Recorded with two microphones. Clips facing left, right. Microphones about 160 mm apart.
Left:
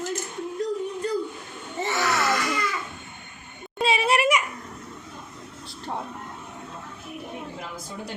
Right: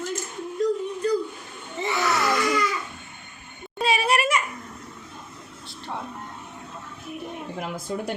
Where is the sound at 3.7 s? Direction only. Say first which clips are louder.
Even; 20° left (ahead or behind).